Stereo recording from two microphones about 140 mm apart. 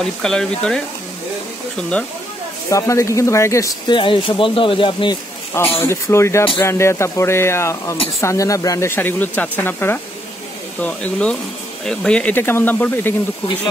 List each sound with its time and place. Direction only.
0.0 s speech: 5° left (ahead or behind)
2.7 s speech: 20° left (ahead or behind)
3.9 s speech: 35° left (ahead or behind)
5.8 s speech: 20° left (ahead or behind)